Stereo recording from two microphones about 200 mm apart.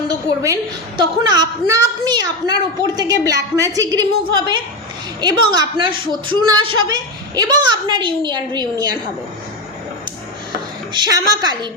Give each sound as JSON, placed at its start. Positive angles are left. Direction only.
{"t": 0.1, "sound": "a woman's voice", "side_deg": -20}
{"t": 10.9, "sound": "a woman's voice", "side_deg": -20}